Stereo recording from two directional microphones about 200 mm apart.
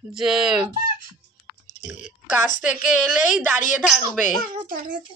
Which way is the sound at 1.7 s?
40° left (ahead or behind).